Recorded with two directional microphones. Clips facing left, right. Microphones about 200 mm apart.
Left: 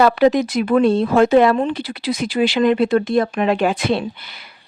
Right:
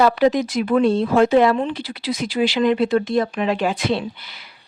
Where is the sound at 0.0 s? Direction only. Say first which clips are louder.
Left 2 dB; 65° left (ahead or behind).